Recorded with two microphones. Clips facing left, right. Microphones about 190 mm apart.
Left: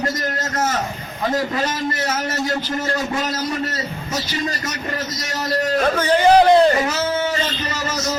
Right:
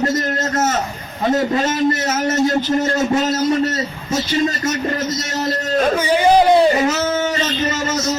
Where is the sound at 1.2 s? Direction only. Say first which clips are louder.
Right 4 dB; 25° right (ahead or behind).